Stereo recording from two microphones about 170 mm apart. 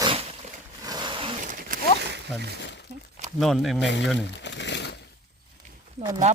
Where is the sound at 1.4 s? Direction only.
50° right (ahead or behind).